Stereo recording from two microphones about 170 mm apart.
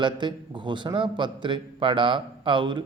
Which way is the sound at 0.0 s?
30° right (ahead or behind).